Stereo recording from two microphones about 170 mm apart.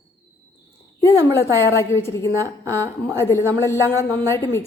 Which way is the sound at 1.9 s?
15° left (ahead or behind).